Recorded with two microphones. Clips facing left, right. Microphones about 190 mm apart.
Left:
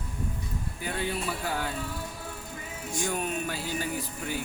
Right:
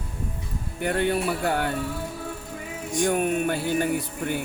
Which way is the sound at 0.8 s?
65° right (ahead or behind).